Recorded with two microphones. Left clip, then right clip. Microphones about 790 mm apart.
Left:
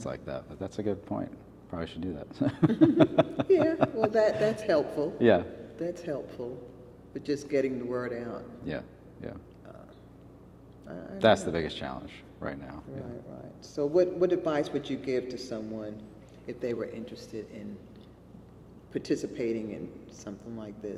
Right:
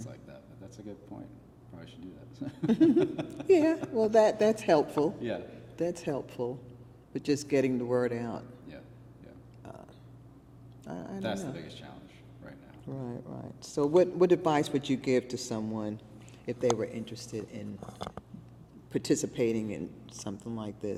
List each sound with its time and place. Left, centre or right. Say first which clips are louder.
0.0 s speech: left 12 dB; left
2.6 s a man's voice: left 1 dB; right
3.0 s speech: left 8 dB; left
3.4 s a man's voice: right 4 dB; right
5.3 s speech: left 13 dB; left
5.8 s a man's voice: right 2 dB; right
8.7 s speech: left 12 dB; left
10.8 s a man's voice: right 1 dB; right
11.2 s speech: left 14 dB; left
13.6 s a man's voice: right 1 dB; right
16.5 s speech: right 4 dB; right
18.9 s a man's voice: right 1 dB; right